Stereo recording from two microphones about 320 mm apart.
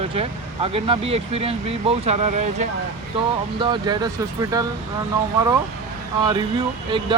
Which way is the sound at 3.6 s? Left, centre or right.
Centre.